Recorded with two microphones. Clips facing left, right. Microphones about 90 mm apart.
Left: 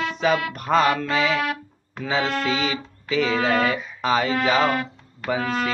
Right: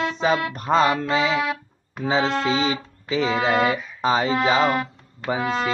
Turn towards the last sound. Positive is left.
turn(degrees=-25)  # may be behind; listen again after turning